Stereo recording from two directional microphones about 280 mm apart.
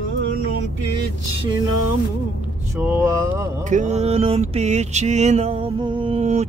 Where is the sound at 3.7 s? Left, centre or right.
Right.